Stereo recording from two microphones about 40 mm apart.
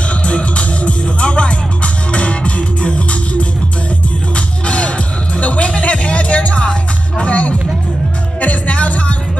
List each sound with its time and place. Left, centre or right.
0.3 s music: left
4.6 s music: left